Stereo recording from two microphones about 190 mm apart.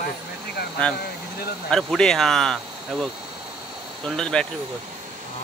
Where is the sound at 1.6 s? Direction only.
5° left (ahead or behind).